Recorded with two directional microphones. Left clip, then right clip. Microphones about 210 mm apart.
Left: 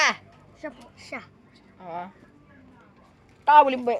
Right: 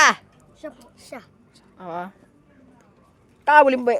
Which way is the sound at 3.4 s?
50° right (ahead or behind).